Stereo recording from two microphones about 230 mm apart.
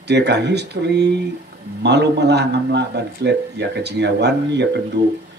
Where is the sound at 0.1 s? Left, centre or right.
Right.